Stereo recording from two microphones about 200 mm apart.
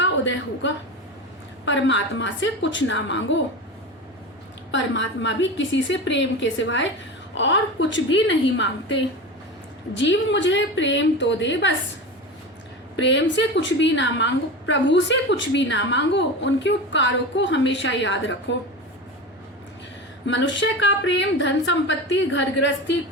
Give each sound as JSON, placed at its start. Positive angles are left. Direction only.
{"t": 0.0, "sound": "a woman's voice", "side_deg": 65}
{"t": 4.7, "sound": "a woman's voice", "side_deg": 65}
{"t": 13.0, "sound": "a woman's voice", "side_deg": 65}
{"t": 20.2, "sound": "a woman's voice", "side_deg": 65}